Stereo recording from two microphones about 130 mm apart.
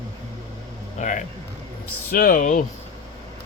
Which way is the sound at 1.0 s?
70° left (ahead or behind).